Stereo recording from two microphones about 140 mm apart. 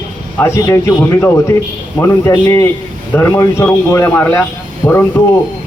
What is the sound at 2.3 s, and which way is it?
A man's voice, 25° left (ahead or behind).